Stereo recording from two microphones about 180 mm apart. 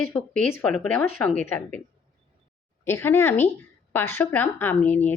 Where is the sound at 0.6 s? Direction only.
5° left (ahead or behind).